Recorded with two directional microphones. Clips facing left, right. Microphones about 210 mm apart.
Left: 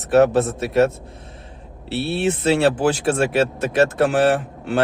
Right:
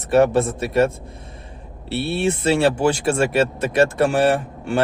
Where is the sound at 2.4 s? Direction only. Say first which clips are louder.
Left 1 dB; 10° right (ahead or behind).